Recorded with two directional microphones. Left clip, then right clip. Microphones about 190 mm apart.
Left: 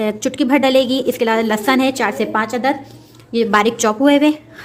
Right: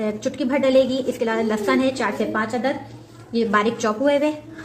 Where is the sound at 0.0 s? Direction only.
50° left (ahead or behind).